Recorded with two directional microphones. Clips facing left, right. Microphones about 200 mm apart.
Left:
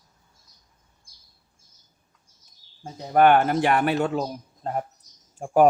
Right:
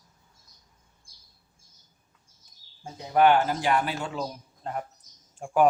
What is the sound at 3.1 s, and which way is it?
Speech, 55° left (ahead or behind).